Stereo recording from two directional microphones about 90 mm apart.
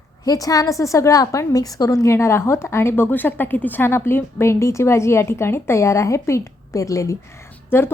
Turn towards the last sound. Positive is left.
turn(degrees=25)  # may be behind; listen again after turning